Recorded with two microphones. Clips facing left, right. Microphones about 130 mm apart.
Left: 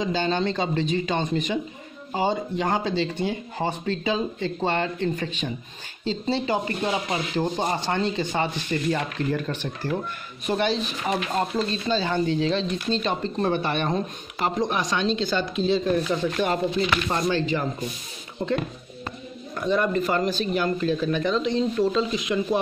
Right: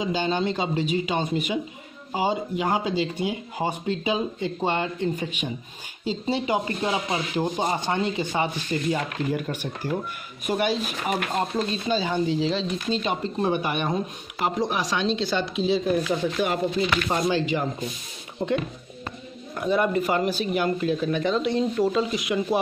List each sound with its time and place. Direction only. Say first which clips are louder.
0.0 s speech: left 1 dB; 10° right (ahead or behind)
19.6 s speech: even; 10° right (ahead or behind)